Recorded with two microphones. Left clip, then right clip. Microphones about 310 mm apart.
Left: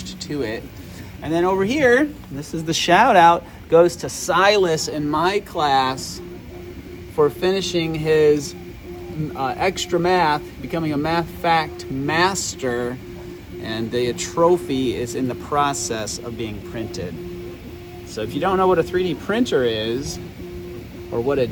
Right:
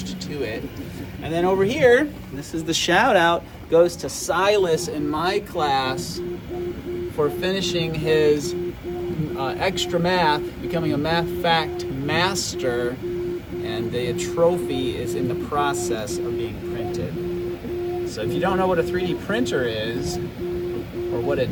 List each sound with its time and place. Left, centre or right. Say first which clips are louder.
1.3 s speech: left 1 dB; left
7.2 s speech: left 5 dB; centre
9.4 s speech: left 3 dB; left
18.2 s speech: left 4 dB; left
21.2 s speech: left 4 dB; left